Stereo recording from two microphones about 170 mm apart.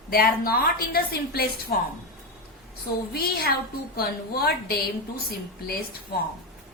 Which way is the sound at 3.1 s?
65° left (ahead or behind).